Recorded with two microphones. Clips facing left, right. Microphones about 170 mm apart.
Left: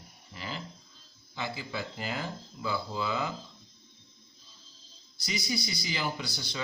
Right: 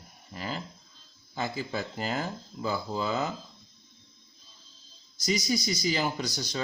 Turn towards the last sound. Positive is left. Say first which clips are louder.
# right 5 dB
turn(degrees=-45)  # may be behind; listen again after turning